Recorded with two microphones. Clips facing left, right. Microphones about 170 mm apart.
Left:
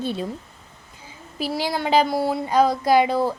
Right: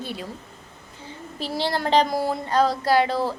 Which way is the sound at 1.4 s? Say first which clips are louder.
Left 1 dB; 10° left (ahead or behind).